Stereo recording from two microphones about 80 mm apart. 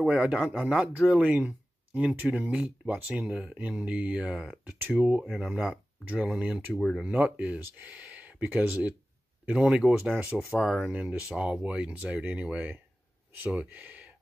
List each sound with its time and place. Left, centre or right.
0.0 s speech: centre
6.8 s speech: centre
7.1 s speech: centre
11.1 s speech: centre